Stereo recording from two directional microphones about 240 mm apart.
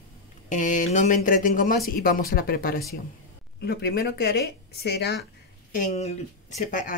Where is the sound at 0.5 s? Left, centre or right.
Left.